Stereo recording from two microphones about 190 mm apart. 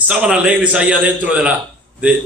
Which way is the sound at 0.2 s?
5° right (ahead or behind).